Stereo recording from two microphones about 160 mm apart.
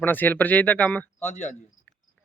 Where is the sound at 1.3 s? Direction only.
45° left (ahead or behind).